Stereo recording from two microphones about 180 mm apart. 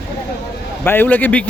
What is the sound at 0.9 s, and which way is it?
Speech, 10° left (ahead or behind).